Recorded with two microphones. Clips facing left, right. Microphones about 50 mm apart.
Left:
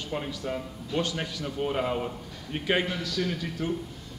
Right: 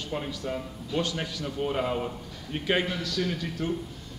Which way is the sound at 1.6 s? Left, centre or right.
Centre.